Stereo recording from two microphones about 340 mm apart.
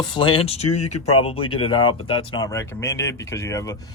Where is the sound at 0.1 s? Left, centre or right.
Centre.